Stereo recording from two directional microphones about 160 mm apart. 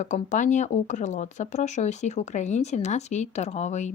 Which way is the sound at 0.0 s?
50° left (ahead or behind).